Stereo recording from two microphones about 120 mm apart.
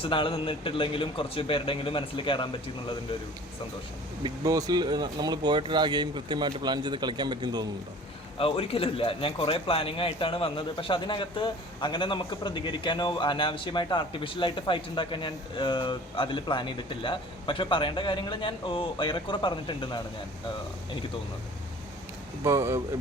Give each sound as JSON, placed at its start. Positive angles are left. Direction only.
{"t": 0.0, "sound": "a man's voice", "side_deg": 45}
{"t": 4.2, "sound": "speech", "side_deg": -30}
{"t": 8.4, "sound": "a man's voice", "side_deg": 50}
{"t": 22.4, "sound": "speech", "side_deg": -20}